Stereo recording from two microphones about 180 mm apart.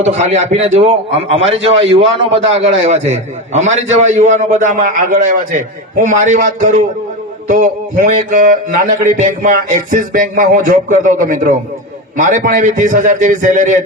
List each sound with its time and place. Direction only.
0.0 s a man's voice: 40° right (ahead or behind)
4.0 s music: 40° right (ahead or behind)